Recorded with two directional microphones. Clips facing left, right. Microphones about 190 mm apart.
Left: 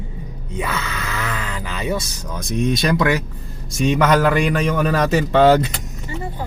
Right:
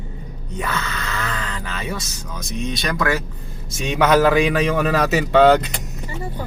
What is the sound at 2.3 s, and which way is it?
Speech, 55° left (ahead or behind).